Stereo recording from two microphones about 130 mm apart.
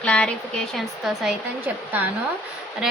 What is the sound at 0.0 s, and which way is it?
Speech, 10° left (ahead or behind).